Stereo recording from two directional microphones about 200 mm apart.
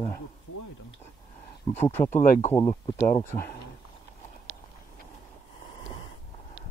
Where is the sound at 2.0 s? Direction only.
35° left (ahead or behind).